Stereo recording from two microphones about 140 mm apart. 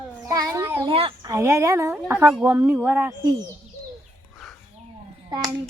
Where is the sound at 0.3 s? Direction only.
25° right (ahead or behind).